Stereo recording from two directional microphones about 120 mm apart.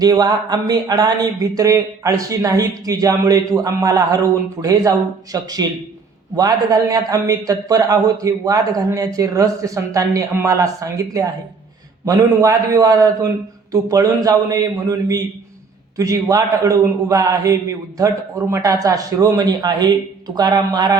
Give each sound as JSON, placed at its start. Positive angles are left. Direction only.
{"t": 0.0, "sound": "speech", "side_deg": -35}
{"t": 6.7, "sound": "a man's voice", "side_deg": -30}